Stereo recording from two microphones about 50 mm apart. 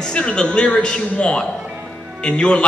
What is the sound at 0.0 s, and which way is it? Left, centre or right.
A woman's voice, centre.